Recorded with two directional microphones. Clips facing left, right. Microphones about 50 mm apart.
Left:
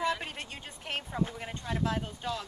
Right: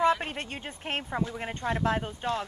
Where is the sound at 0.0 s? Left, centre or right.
Right.